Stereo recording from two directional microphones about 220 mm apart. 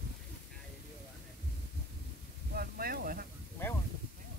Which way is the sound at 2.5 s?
45° right (ahead or behind).